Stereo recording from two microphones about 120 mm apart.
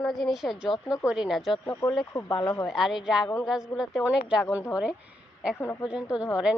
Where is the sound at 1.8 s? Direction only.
35° left (ahead or behind).